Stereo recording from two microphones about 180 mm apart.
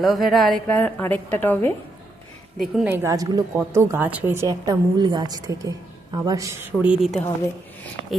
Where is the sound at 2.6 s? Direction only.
5° right (ahead or behind).